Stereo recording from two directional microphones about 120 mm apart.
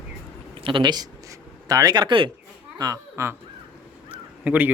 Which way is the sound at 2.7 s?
30° right (ahead or behind).